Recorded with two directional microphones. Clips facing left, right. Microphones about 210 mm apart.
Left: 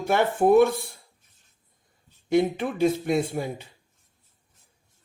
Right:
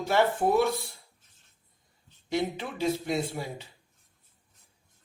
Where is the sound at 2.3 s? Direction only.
50° left (ahead or behind).